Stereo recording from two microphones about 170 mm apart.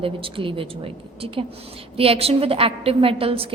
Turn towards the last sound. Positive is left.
turn(degrees=-35)  # may be behind; listen again after turning